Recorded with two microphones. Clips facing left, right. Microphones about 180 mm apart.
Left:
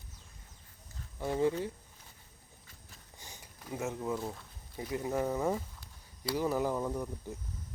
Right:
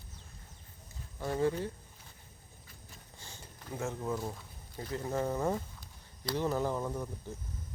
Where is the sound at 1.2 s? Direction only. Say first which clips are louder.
Left 1 dB; 10° left (ahead or behind).